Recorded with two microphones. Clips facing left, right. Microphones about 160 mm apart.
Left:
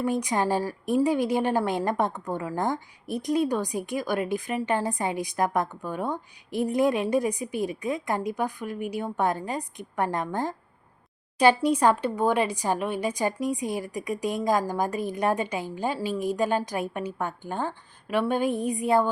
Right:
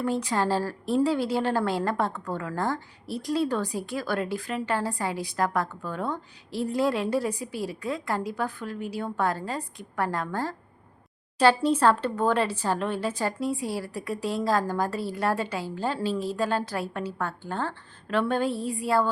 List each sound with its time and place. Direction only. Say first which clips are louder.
0.0 s a woman's voice: left 1 dB; 15° left (ahead or behind)